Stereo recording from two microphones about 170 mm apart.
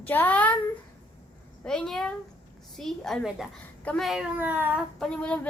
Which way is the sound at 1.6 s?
5° left (ahead or behind).